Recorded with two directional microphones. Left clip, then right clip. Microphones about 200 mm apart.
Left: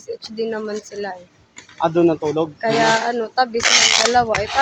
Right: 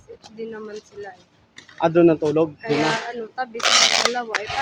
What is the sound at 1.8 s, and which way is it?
Speech, 25° right (ahead or behind).